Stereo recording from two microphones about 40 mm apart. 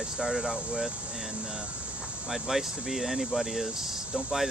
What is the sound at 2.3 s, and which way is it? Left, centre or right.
Speech, centre.